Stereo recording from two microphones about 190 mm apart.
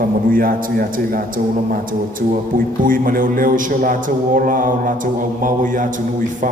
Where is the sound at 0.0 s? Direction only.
50° right (ahead or behind).